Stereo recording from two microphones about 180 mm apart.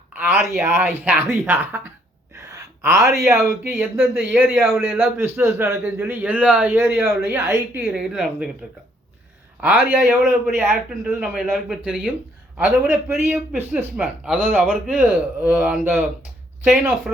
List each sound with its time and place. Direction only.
0.1 s a sound: 10° right (ahead or behind)
0.4 s a man's voice: 10° right (ahead or behind)
2.3 s gasp: 15° right (ahead or behind)
3.2 s a man's voice: 15° right (ahead or behind)
7.8 s speech: centre (ahead or behind)
9.6 s a man's voice: 10° right (ahead or behind)